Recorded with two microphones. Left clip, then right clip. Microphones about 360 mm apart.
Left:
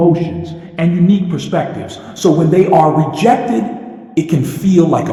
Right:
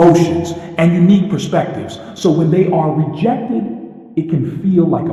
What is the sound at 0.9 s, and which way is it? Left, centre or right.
A man's voice, centre.